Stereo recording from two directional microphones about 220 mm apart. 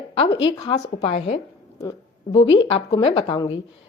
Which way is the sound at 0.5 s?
20° left (ahead or behind).